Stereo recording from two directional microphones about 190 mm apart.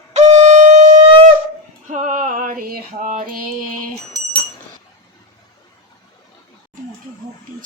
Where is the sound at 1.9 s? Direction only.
45° right (ahead or behind).